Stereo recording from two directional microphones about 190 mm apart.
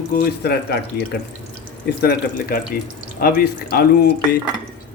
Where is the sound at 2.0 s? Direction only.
55° left (ahead or behind).